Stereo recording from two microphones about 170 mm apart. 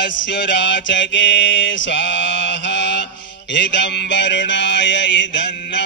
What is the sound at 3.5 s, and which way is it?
Music, 90° left.